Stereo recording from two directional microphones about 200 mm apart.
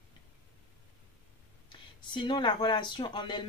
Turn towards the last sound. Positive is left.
turn(degrees=25)  # may be behind; listen again after turning